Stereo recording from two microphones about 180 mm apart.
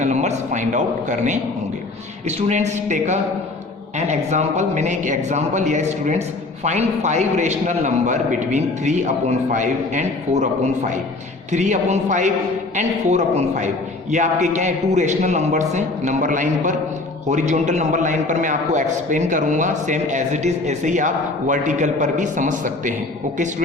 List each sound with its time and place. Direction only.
0.0 s a man's voice: 40° right (ahead or behind)